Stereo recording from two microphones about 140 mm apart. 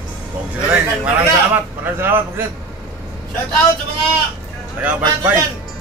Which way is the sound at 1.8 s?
15° right (ahead or behind).